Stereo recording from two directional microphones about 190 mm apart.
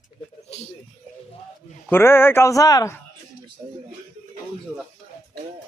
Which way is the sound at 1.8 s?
10° left (ahead or behind).